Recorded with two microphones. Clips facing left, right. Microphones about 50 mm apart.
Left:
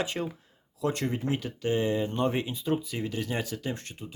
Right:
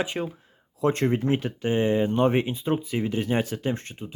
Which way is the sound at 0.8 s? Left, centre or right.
Right.